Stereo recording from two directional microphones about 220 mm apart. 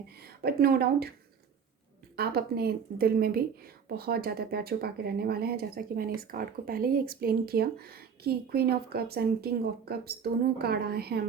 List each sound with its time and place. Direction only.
0.2 s a woman's voice: 45° right (ahead or behind)
2.1 s a woman's voice: 45° right (ahead or behind)